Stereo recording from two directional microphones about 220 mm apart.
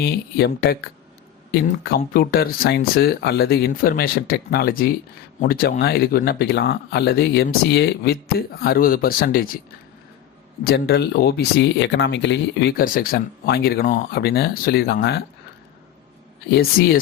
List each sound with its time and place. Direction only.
0.0 s speech: 45° left (ahead or behind)
10.6 s speech: 45° left (ahead or behind)
16.5 s speech: 45° left (ahead or behind)